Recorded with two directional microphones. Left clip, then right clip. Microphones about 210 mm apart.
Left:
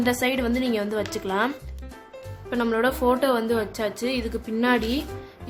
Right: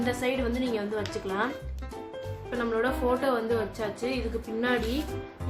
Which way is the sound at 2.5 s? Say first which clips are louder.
Left 5 dB; 55° left (ahead or behind).